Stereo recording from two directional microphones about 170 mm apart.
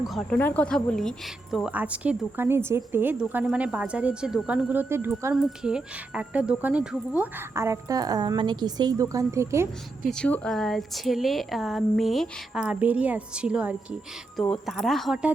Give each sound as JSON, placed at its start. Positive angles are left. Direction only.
{"t": 0.0, "sound": "a woman's voice", "side_deg": 0}
{"t": 10.1, "sound": "a woman's voice", "side_deg": 5}